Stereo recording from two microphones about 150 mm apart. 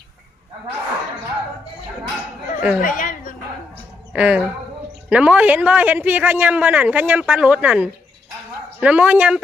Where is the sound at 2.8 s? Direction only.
65° left (ahead or behind).